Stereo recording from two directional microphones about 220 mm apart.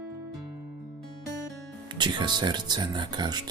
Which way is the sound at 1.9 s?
20° right (ahead or behind).